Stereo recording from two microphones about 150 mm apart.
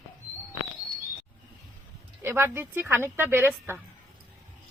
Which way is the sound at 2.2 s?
15° right (ahead or behind).